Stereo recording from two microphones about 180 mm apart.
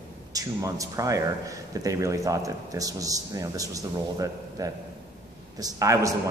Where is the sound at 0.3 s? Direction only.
20° right (ahead or behind).